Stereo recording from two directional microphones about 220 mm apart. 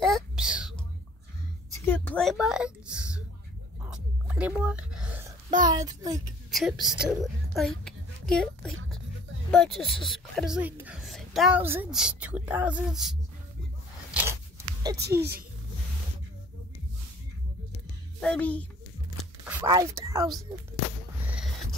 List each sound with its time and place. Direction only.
0.0 s whispering: centre (ahead or behind)
1.9 s a woman's voice: 5° left (ahead or behind)
3.8 s whispering: 5° right (ahead or behind)
5.7 s a woman's voice: 15° right (ahead or behind)
6.5 s speech: centre (ahead or behind)
7.5 s a sound: centre (ahead or behind)
9.5 s speech: centre (ahead or behind)
14.1 s zipper: 10° right (ahead or behind)
18.2 s a child's voice: 5° left (ahead or behind)
19.1 s a sound: 10° right (ahead or behind)